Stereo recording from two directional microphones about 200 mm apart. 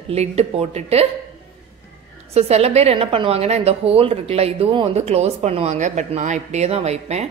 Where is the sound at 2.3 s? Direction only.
30° right (ahead or behind).